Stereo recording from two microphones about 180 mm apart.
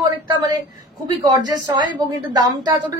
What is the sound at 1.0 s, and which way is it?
A woman's voice, 20° right (ahead or behind).